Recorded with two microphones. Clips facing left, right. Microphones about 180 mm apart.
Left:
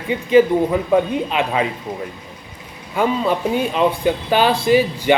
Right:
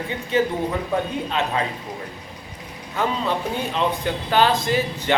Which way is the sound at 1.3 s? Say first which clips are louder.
Left 4 dB; 15° left (ahead or behind).